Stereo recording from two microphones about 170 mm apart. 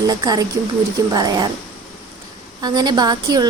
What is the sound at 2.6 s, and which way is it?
Speech, 25° right (ahead or behind).